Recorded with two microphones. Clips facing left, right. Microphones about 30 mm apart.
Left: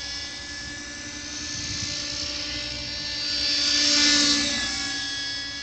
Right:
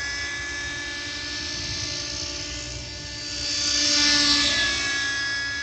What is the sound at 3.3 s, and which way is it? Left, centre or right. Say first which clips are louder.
Vehicle: left 2 dB; left.